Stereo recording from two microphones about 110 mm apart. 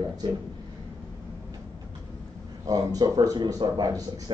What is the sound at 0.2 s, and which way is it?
Speech, 40° right (ahead or behind).